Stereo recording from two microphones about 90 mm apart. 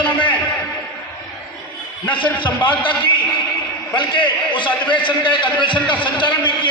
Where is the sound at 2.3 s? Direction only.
60° left (ahead or behind).